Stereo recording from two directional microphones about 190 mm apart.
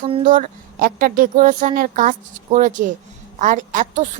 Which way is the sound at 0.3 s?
45° right (ahead or behind).